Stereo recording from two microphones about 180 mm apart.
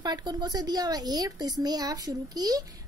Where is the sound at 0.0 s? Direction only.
25° right (ahead or behind).